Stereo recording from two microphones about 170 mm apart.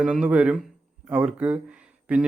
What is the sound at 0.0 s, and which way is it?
A man's voice, 5° right (ahead or behind).